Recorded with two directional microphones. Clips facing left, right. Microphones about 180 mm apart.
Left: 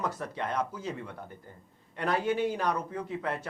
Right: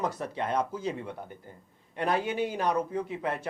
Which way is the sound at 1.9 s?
20° right (ahead or behind).